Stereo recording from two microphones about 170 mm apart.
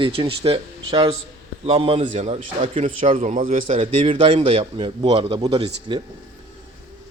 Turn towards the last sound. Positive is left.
turn(degrees=-30)  # may be behind; listen again after turning